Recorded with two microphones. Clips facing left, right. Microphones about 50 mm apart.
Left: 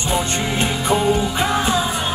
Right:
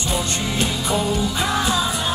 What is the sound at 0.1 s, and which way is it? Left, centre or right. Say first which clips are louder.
Music: left 4 dB; left.